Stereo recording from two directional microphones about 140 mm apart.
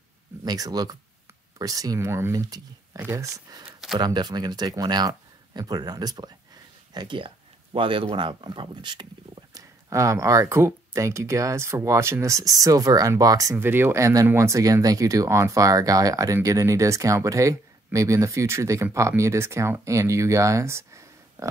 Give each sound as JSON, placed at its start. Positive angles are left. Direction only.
{"t": 0.5, "sound": "speech", "side_deg": -30}
{"t": 3.6, "sound": "speech", "side_deg": 0}
{"t": 4.0, "sound": "speech", "side_deg": -30}